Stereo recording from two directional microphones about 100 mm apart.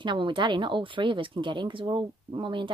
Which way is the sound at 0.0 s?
55° right (ahead or behind).